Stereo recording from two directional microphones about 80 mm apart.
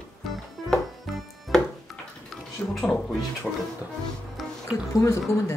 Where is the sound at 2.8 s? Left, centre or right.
Centre.